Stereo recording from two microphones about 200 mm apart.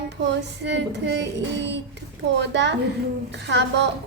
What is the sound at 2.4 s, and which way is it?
A child's voice, 60° right (ahead or behind).